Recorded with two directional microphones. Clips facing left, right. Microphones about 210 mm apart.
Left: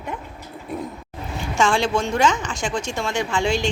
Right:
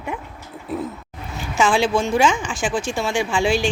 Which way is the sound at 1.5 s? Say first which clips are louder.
Right 2 dB; 5° right (ahead or behind).